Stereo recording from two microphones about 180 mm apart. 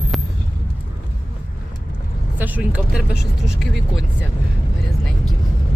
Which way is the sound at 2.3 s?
10° right (ahead or behind).